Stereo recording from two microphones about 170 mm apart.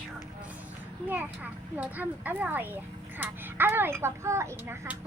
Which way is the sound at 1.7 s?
10° right (ahead or behind).